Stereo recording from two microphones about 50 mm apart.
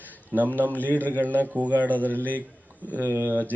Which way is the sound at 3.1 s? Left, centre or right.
Right.